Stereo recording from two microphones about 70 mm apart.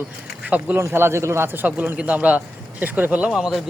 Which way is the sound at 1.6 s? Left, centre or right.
Right.